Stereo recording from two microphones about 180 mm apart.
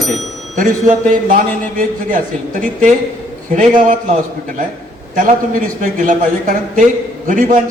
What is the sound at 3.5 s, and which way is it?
Speech, 45° right (ahead or behind).